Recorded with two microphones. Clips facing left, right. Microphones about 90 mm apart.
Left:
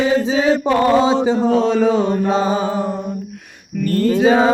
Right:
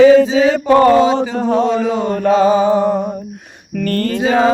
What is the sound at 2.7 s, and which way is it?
Mantra, 70° right (ahead or behind).